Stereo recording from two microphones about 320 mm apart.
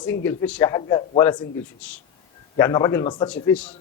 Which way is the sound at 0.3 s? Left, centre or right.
Centre.